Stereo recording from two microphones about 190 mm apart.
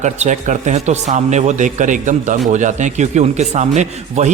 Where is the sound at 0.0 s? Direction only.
40° right (ahead or behind).